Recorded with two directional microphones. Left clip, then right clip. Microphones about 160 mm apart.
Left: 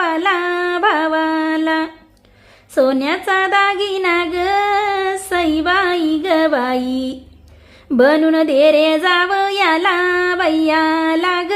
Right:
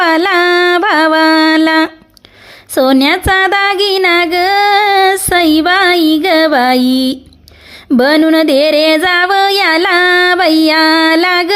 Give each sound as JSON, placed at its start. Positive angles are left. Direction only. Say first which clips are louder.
{"t": 0.0, "sound": "music", "louder": "right 7 dB", "side_deg": -35}
{"t": 2.7, "sound": "female singing", "louder": "right 6 dB", "side_deg": -40}